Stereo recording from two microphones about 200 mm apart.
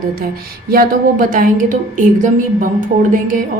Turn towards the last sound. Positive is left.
turn(degrees=-40)  # may be behind; listen again after turning